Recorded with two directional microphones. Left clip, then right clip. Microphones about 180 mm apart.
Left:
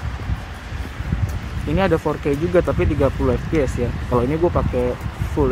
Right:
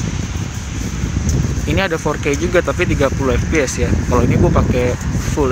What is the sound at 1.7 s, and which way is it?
Speech, 5° left (ahead or behind).